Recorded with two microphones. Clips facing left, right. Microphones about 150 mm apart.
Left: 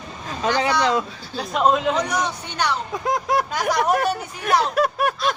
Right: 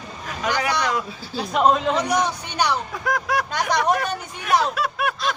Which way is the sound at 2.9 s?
20° left (ahead or behind).